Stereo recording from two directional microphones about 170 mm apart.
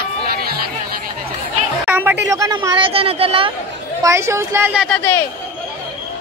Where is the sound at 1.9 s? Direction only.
10° right (ahead or behind); by 3.5 s 35° right (ahead or behind).